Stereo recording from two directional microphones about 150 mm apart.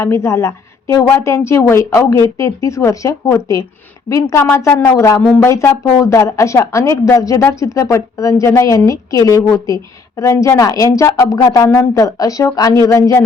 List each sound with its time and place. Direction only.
0.0 s a woman's voice: 20° left (ahead or behind)